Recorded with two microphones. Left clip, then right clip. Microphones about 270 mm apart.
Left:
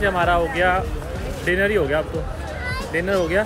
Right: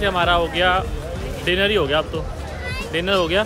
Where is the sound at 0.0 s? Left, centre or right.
Centre.